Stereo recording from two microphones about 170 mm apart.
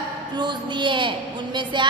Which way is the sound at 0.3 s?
25° right (ahead or behind).